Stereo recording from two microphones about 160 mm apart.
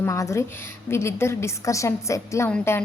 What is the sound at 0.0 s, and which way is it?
A woman's voice, 20° left (ahead or behind).